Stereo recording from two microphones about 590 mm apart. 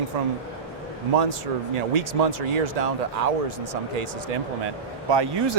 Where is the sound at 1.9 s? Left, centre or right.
Right.